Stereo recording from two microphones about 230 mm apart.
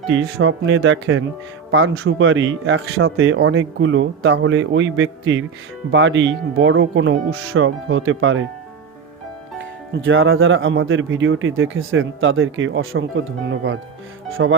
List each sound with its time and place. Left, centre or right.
0.1 s speech: right
9.6 s speech: right